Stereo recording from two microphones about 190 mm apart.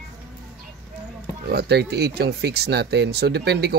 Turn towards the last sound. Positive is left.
turn(degrees=-60)  # may be behind; listen again after turning